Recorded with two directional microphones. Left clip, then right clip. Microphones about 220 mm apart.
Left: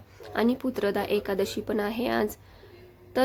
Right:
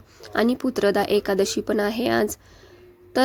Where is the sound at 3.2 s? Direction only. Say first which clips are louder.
Right 4 dB; 25° right (ahead or behind).